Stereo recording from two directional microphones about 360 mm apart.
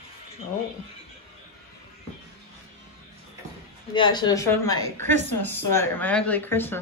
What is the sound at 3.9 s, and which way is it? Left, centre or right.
Speech, centre.